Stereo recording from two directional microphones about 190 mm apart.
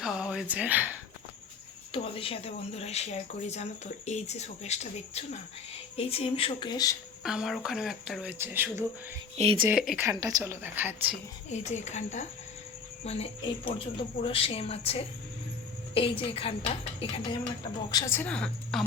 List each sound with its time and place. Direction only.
0.0 s a sound: 5° right (ahead or behind)
1.9 s speech: 30° left (ahead or behind)
7.2 s speech: 5° right (ahead or behind)
9.4 s speech: 30° right (ahead or behind)
9.6 s speech: 5° right (ahead or behind)
10.0 s a woman's voice: 15° right (ahead or behind)
11.4 s speech: 35° left (ahead or behind)
17.9 s a woman's voice: 15° left (ahead or behind)